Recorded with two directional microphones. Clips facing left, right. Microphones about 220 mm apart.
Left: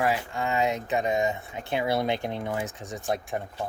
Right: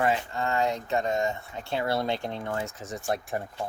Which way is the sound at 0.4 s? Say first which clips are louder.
Left 1 dB; 20° left (ahead or behind).